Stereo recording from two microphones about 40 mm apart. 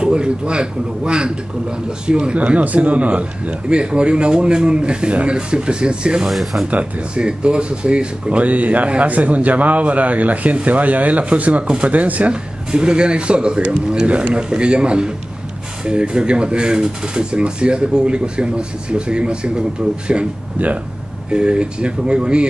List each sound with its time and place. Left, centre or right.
0.0 s speech: right
2.3 s speech: right
6.2 s speech: centre
7.2 s speech: right
11.6 s speech: right
11.9 s speech: right
20.5 s speech: right
21.3 s speech: right